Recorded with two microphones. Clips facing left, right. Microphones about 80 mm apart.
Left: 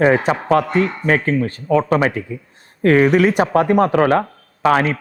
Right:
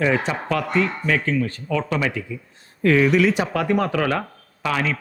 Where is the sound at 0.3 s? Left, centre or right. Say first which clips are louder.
Left 8 dB; left.